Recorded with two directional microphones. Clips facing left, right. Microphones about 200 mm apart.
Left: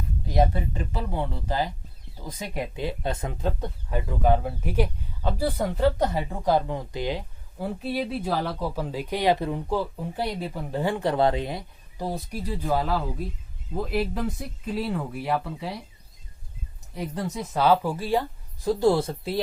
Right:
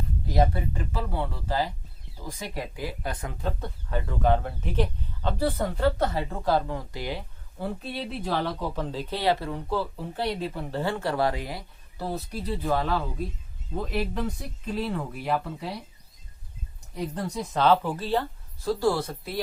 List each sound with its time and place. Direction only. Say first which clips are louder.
0.3 s speech: left 1 dB; 20° left (ahead or behind)
7.6 s speech: left 4 dB; 10° left (ahead or behind)
16.9 s speech: even; 5° left (ahead or behind); by 19.4 s 25° left (ahead or behind)